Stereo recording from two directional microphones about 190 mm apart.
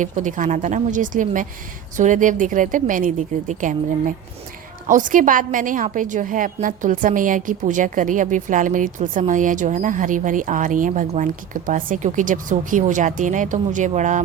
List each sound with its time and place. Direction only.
0.0 s a woman's voice: 40° right (ahead or behind)